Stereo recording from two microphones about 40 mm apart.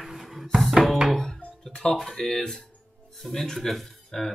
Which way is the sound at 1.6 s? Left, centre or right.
Left.